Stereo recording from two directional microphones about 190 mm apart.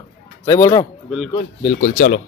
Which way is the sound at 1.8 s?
45° left (ahead or behind).